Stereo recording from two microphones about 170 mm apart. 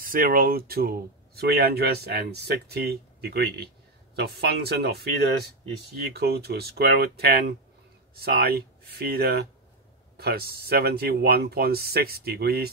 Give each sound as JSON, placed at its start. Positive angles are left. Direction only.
{"t": 0.0, "sound": "speech", "side_deg": -55}